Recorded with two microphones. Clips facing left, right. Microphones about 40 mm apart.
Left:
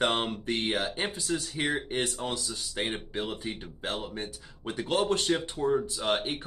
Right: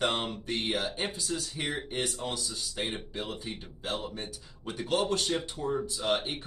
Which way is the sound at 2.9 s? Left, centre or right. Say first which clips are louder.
Left 3 dB; left.